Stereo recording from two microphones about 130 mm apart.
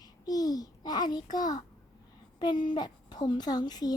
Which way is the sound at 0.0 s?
30° left (ahead or behind).